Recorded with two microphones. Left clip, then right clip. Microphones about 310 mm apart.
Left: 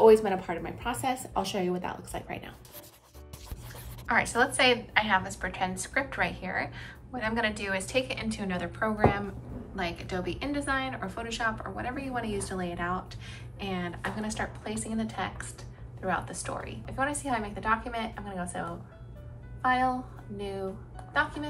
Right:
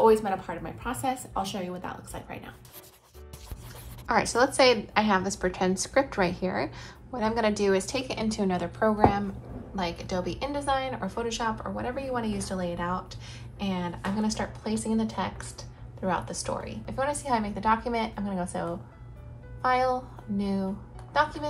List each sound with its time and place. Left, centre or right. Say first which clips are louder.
0.2 s a woman's voice: even; centre
4.1 s a woman's voice: right 2 dB; centre
19.6 s a woman's voice: right 1 dB; centre
21.1 s speech: right 3 dB; centre